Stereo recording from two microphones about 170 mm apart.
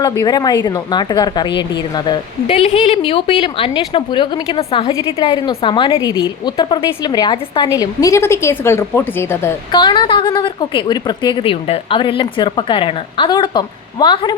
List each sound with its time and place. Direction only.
0.0 s a woman's voice: 20° left (ahead or behind)
2.5 s a woman's voice: 40° left (ahead or behind); by 9.6 s 15° left (ahead or behind)
9.7 s a woman's voice: 25° left (ahead or behind)